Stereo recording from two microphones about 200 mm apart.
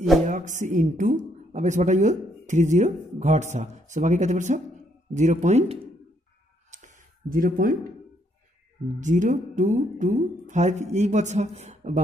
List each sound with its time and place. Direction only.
0.2 s a woman's voice: 40° right (ahead or behind)
6.7 s a sound: 40° right (ahead or behind)
9.0 s a woman's voice: 40° right (ahead or behind)